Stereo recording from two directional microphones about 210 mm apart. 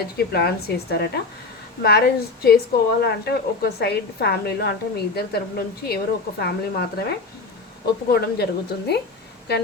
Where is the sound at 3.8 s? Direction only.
50° left (ahead or behind).